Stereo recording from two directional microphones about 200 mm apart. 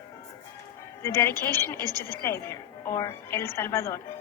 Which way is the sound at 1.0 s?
15° left (ahead or behind).